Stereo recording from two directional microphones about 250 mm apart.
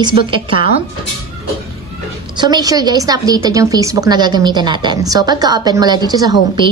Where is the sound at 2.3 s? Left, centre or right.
Centre.